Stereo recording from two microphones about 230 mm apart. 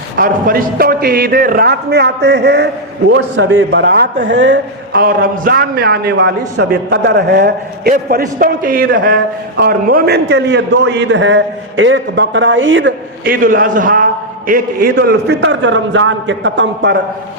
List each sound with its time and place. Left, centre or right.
0.2 s a man's voice: right
3.7 s a man's voice: right
13.3 s a man's voice: right